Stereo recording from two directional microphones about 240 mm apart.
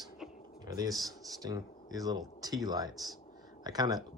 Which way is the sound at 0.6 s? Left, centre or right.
Centre.